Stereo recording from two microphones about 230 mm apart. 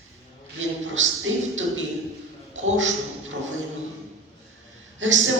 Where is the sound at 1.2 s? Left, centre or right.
Right.